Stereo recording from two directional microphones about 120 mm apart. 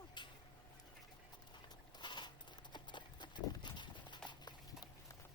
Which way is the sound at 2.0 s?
40° left (ahead or behind).